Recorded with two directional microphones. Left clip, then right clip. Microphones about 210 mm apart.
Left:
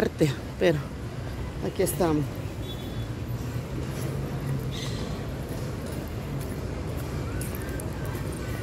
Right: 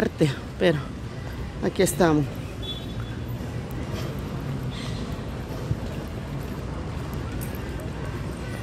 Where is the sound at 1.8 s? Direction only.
20° right (ahead or behind).